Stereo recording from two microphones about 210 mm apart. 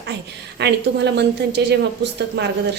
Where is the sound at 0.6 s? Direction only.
55° right (ahead or behind).